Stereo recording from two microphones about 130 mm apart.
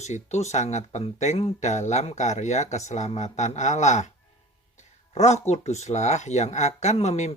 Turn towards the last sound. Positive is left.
turn(degrees=55)  # may be behind; listen again after turning